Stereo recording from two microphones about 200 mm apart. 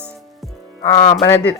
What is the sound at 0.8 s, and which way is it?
Speech, 25° left (ahead or behind).